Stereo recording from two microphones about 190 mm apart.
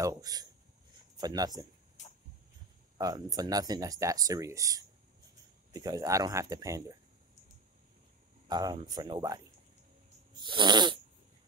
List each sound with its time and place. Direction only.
0.0 s speech: 20° right (ahead or behind)
2.0 s a sound: 40° left (ahead or behind)
3.0 s speech: 20° right (ahead or behind)
8.5 s speech: 20° right (ahead or behind)